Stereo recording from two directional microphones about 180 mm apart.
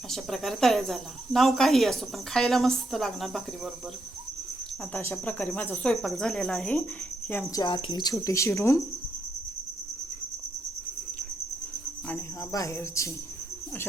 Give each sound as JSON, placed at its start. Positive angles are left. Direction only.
{"t": 0.1, "sound": "speech", "side_deg": 0}
{"t": 4.9, "sound": "speech", "side_deg": 15}
{"t": 7.3, "sound": "cricket", "side_deg": 10}
{"t": 7.5, "sound": "speech", "side_deg": 25}
{"t": 12.0, "sound": "cricket", "side_deg": 15}